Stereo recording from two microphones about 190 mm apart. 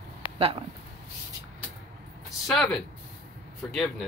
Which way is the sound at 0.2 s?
25° left (ahead or behind).